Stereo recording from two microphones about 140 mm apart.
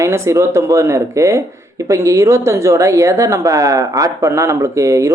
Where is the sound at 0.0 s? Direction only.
20° right (ahead or behind).